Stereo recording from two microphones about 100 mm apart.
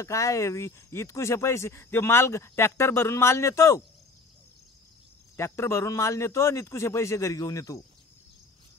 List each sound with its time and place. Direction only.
0.0 s speech: 30° left (ahead or behind)
5.3 s speech: 25° left (ahead or behind)